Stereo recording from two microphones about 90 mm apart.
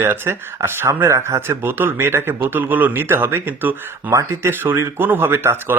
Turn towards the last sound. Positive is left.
turn(degrees=-25)  # may be behind; listen again after turning